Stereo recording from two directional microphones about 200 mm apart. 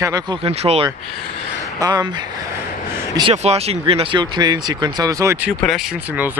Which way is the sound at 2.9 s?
20° right (ahead or behind).